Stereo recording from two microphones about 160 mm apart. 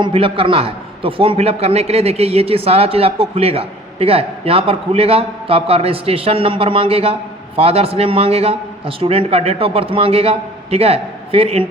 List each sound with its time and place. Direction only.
0.0 s a man's voice: 35° right (ahead or behind)